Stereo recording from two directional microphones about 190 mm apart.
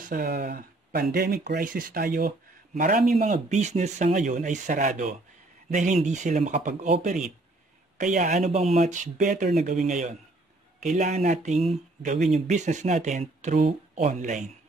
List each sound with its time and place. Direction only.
0.0 s speech: 50° right (ahead or behind)
3.2 s speech: 35° right (ahead or behind)